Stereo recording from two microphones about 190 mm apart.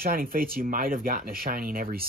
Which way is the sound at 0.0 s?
50° right (ahead or behind).